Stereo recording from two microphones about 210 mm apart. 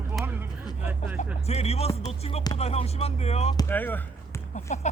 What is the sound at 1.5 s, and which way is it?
Speech, 30° left (ahead or behind).